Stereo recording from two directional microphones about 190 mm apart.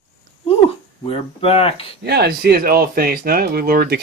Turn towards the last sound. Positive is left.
turn(degrees=-55)  # may be behind; listen again after turning